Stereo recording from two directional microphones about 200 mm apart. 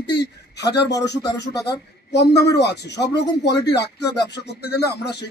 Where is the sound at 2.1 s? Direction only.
55° left (ahead or behind).